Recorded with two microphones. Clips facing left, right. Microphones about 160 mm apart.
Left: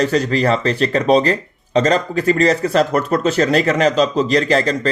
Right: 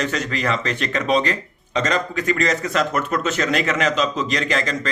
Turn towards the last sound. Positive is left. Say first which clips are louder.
# left 7 dB
turn(degrees=35)  # may be behind; listen again after turning